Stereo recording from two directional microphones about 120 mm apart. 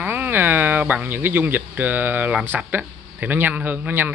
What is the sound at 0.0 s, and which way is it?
Speech, 15° right (ahead or behind).